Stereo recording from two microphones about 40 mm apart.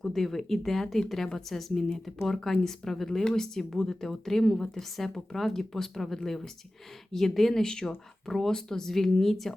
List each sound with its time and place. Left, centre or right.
0.0 s speech: centre
7.6 s speech: centre